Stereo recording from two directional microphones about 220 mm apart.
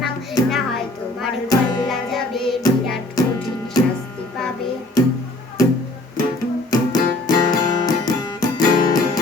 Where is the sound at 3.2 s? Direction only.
15° left (ahead or behind).